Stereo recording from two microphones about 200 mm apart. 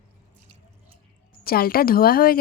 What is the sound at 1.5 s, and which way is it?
Speech, 50° left (ahead or behind).